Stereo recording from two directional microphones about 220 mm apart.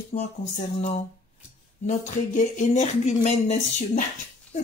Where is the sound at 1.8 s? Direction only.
35° left (ahead or behind).